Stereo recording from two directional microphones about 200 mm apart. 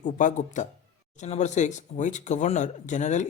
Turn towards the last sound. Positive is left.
turn(degrees=35)  # may be behind; listen again after turning